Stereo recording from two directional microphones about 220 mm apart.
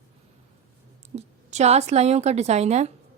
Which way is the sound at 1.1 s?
30° right (ahead or behind).